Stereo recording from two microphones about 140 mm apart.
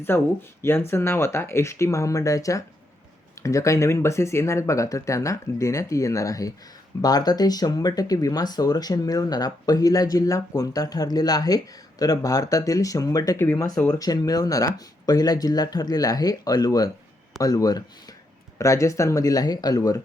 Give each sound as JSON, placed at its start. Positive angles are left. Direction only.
{"t": 0.1, "sound": "speech", "side_deg": 15}